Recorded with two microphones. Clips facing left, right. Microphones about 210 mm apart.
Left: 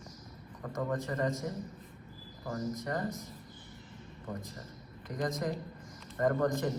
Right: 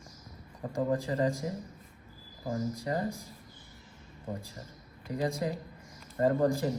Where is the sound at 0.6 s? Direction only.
30° right (ahead or behind).